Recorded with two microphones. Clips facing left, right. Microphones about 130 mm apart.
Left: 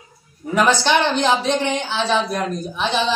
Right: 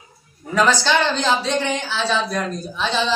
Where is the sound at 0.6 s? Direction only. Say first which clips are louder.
Left 1 dB; 15° left (ahead or behind).